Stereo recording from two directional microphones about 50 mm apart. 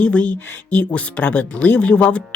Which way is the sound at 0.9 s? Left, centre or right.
Left.